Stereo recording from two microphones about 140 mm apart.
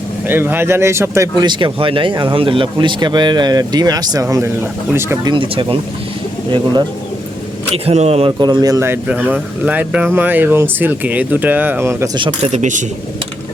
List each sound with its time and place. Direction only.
0.3 s speech: 15° right (ahead or behind)
1.5 s speech: 35° right (ahead or behind); by 5.3 s 20° right (ahead or behind)
5.3 s speech: 35° right (ahead or behind)
7.9 s speech: 50° right (ahead or behind)
8.4 s speech: 30° right (ahead or behind)
9.0 s speech: 10° right (ahead or behind)
12.4 s speech: 55° right (ahead or behind)